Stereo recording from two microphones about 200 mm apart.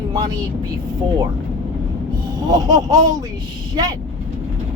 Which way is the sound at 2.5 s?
20° right (ahead or behind).